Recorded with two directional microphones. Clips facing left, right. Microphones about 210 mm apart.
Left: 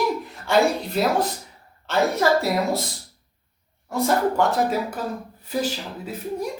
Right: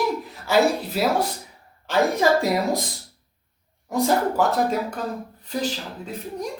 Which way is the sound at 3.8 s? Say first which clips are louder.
Right 1 dB; 15° right (ahead or behind).